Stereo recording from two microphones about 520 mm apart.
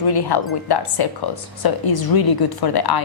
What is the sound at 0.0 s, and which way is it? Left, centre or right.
Speech, left.